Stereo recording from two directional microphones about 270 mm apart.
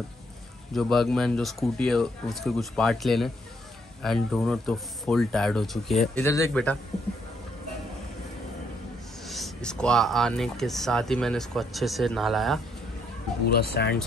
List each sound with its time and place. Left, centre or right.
0.7 s speech: centre
9.3 s speech: centre
13.6 s speech: left